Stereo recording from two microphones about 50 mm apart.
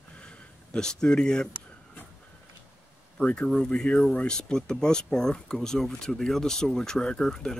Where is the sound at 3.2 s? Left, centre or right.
Left.